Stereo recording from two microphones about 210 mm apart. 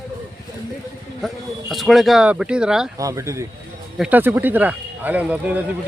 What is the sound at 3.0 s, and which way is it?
Speech, 15° right (ahead or behind).